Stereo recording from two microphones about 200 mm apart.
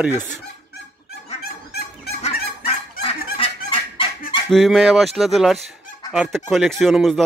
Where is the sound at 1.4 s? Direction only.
50° left (ahead or behind).